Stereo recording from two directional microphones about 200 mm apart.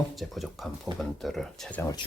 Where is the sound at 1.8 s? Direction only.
15° left (ahead or behind).